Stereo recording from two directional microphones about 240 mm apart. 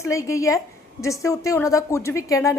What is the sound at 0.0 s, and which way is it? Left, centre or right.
A woman's voice, centre.